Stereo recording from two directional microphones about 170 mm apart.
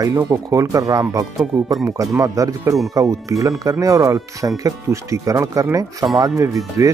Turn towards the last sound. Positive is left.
turn(degrees=-15)  # may be behind; listen again after turning